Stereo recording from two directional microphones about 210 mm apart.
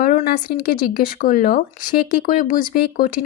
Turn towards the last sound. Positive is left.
turn(degrees=40)  # may be behind; listen again after turning